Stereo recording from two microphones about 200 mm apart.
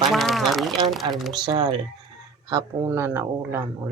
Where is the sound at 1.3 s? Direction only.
20° right (ahead or behind).